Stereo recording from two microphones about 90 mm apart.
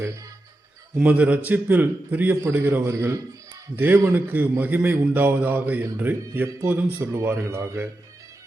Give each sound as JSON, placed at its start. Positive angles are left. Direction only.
{"t": 0.9, "sound": "speech", "side_deg": -15}